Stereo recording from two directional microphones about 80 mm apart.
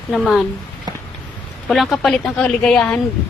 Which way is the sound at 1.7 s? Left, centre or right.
Centre.